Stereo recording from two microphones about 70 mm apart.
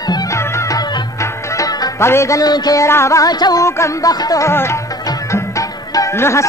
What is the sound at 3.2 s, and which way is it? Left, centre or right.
Music, left.